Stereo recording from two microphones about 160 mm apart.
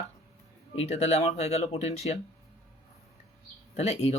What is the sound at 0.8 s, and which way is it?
Speech, 45° left (ahead or behind).